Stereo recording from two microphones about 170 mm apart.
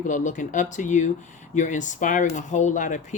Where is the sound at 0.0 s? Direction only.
50° left (ahead or behind).